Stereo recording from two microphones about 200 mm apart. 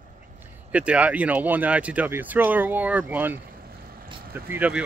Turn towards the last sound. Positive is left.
turn(degrees=-10)  # may be behind; listen again after turning